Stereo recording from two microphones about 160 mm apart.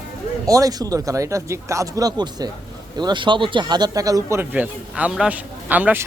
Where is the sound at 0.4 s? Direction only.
20° right (ahead or behind).